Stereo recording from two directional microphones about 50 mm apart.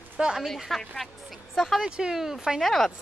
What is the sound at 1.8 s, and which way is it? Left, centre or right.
Speech, centre.